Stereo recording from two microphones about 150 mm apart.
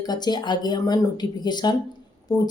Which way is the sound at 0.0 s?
30° left (ahead or behind).